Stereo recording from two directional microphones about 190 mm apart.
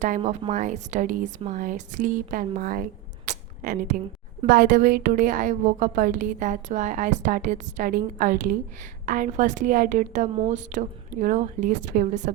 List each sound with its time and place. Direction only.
0.2 s a woman's voice: 35° right (ahead or behind)